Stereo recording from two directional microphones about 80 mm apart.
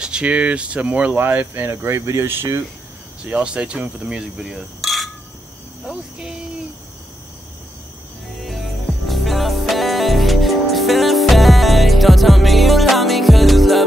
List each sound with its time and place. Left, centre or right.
0.0 s speech: centre; by 2.6 s right
3.3 s insect: centre
5.9 s cricket: centre
8.4 s music: centre